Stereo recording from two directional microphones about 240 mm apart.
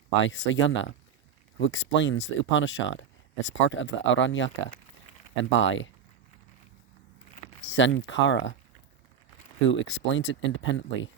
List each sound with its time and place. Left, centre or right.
0.2 s speech: left
7.7 s speech: left
9.6 s speech: left